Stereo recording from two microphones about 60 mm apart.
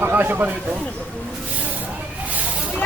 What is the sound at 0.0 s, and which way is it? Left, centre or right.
Speech, right.